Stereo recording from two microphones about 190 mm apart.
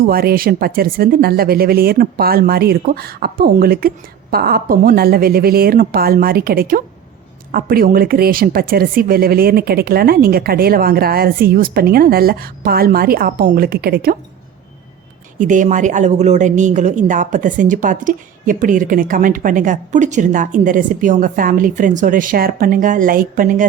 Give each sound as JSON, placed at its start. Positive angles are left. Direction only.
{"t": 0.0, "sound": "a woman's voice", "side_deg": -50}
{"t": 15.4, "sound": "a woman's voice", "side_deg": -40}